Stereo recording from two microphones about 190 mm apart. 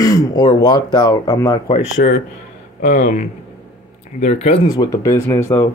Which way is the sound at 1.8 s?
45° left (ahead or behind).